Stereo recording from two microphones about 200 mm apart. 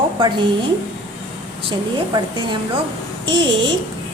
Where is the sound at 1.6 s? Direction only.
25° right (ahead or behind).